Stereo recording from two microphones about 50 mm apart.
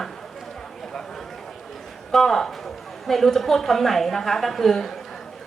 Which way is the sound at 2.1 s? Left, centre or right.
Centre.